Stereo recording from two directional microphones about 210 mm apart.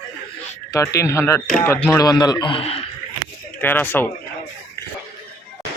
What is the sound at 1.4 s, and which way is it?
Speech, 5° left (ahead or behind).